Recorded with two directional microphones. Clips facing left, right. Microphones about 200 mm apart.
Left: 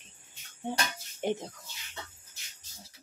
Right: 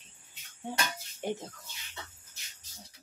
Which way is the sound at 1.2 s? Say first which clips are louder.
Left 4 dB; 20° left (ahead or behind).